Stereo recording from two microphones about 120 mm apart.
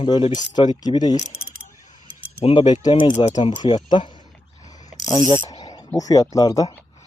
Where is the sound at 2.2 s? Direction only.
50° left (ahead or behind); by 5.6 s 30° left (ahead or behind).